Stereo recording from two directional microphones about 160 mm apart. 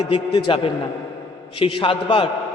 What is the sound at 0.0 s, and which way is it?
A man's voice, 35° left (ahead or behind).